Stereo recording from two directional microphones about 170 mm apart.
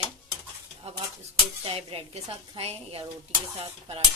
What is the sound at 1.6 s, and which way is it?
Speech, 35° right (ahead or behind).